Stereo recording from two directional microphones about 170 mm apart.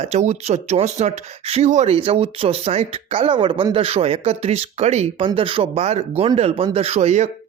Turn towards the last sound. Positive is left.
turn(degrees=-40)  # may be behind; listen again after turning